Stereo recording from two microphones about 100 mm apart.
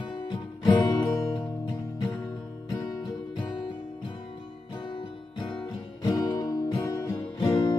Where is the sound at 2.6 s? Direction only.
35° left (ahead or behind).